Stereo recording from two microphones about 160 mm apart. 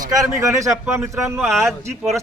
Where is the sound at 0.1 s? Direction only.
20° right (ahead or behind).